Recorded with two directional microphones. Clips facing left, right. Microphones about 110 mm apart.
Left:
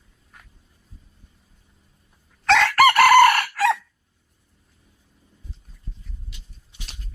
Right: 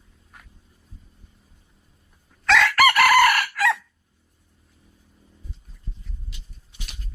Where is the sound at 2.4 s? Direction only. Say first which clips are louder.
Left 2 dB; 35° left (ahead or behind).